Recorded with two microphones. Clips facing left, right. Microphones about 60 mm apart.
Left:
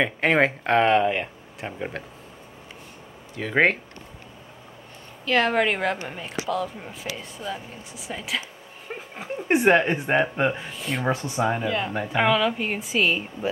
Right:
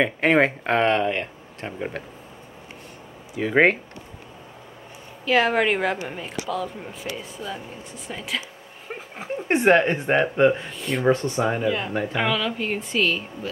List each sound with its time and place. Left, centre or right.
0.0 s a woman's voice: centre
3.3 s speech: centre
5.2 s a woman's voice: centre